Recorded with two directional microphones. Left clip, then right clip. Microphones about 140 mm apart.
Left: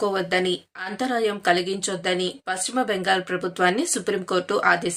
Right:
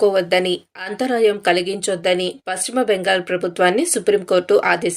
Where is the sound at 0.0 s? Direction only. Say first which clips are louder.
Right 7 dB; 20° right (ahead or behind).